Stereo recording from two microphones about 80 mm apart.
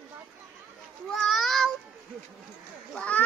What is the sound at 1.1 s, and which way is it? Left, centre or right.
Child singing, centre.